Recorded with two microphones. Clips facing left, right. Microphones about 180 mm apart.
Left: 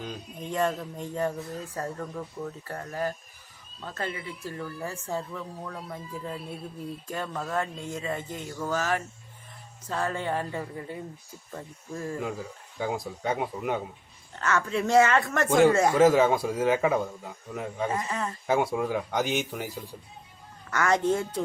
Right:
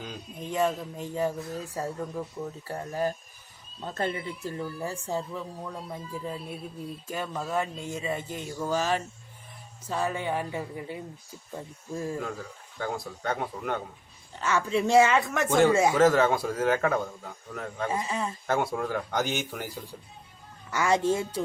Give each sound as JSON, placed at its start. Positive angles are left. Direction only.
{"t": 0.0, "sound": "speech", "side_deg": 0}
{"t": 9.8, "sound": "speech", "side_deg": -10}
{"t": 12.2, "sound": "speech", "side_deg": 10}
{"t": 14.3, "sound": "speech", "side_deg": -10}
{"t": 15.2, "sound": "speech", "side_deg": 0}
{"t": 15.7, "sound": "speech", "side_deg": -10}
{"t": 16.0, "sound": "speech", "side_deg": 5}
{"t": 17.9, "sound": "speech", "side_deg": -10}
{"t": 18.4, "sound": "speech", "side_deg": 5}
{"t": 20.7, "sound": "speech", "side_deg": -10}